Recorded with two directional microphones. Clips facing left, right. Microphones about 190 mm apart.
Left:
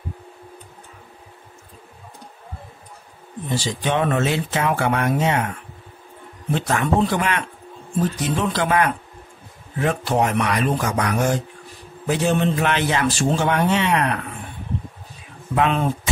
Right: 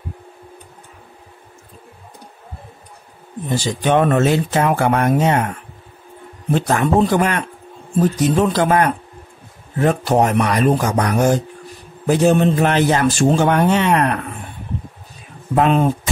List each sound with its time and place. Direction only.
3.4 s a man's voice: 50° right (ahead or behind)
6.5 s a man's voice: 40° right (ahead or behind)
15.5 s speech: 40° right (ahead or behind)